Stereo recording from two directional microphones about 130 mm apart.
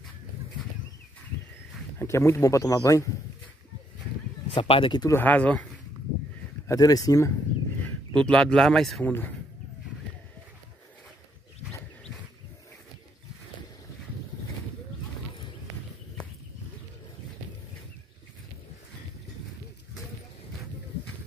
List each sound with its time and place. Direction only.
2.0 s speech: 20° left (ahead or behind)
4.5 s speech: 45° left (ahead or behind)
5.1 s speech: 10° left (ahead or behind)
6.7 s speech: 30° left (ahead or behind)
7.8 s speech: 5° left (ahead or behind)
9.0 s speech: 15° left (ahead or behind)